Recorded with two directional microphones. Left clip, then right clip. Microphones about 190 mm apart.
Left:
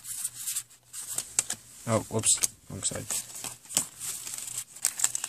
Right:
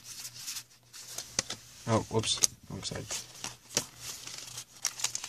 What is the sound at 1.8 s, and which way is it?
Speech, 35° left (ahead or behind).